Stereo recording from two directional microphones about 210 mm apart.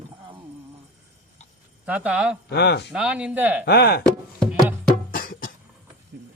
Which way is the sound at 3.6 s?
50° left (ahead or behind).